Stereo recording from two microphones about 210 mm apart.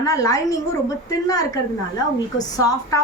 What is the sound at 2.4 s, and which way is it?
Speech, 15° left (ahead or behind).